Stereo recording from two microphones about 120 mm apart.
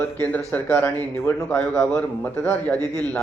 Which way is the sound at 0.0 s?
15° left (ahead or behind).